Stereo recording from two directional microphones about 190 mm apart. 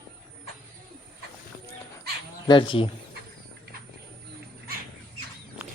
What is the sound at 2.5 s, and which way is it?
Speech, 25° left (ahead or behind).